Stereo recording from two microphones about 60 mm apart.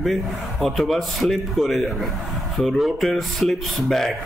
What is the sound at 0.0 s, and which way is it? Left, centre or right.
A man's voice, centre.